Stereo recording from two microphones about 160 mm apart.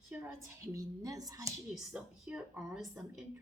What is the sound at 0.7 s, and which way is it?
Speech, 20° right (ahead or behind).